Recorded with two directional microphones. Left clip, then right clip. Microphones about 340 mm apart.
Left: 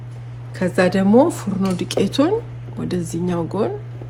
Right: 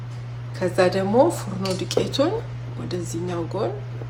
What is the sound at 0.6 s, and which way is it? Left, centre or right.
Speech, left.